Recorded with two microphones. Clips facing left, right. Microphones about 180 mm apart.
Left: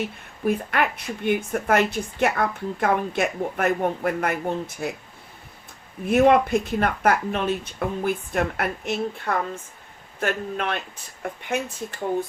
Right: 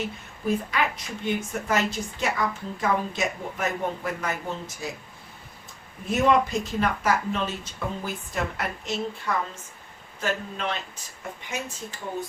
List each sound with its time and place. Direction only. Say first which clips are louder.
0.4 s a woman's voice: left 3 dB; 60° left (ahead or behind)
6.1 s a woman's voice: left 5 dB; 55° left (ahead or behind)